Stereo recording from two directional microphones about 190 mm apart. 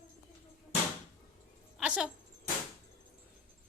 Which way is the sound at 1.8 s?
5° right (ahead or behind).